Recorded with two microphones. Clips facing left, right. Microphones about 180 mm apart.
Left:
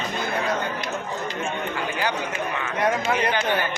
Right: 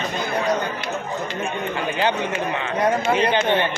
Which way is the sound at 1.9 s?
25° right (ahead or behind).